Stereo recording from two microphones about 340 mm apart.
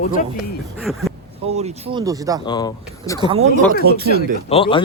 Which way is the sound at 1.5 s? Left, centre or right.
Centre.